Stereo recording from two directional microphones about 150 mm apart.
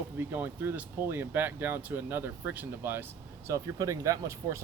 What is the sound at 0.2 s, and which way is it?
Speech, 15° right (ahead or behind).